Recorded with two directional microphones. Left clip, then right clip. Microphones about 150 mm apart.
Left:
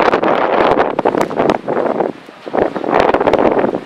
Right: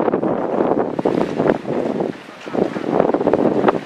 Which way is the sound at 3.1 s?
40° left (ahead or behind).